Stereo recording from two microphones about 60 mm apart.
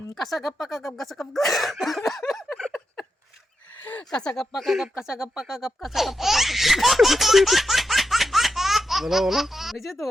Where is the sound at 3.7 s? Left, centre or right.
Left.